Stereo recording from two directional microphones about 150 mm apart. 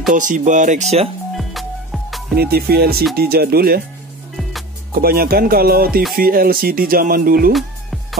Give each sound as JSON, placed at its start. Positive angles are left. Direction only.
{"t": 0.1, "sound": "speech", "side_deg": -60}
{"t": 1.3, "sound": "music", "side_deg": 0}
{"t": 2.3, "sound": "music", "side_deg": -90}
{"t": 4.9, "sound": "speech", "side_deg": -80}
{"t": 7.5, "sound": "music", "side_deg": 0}